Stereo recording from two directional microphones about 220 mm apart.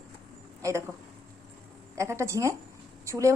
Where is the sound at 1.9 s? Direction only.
15° right (ahead or behind).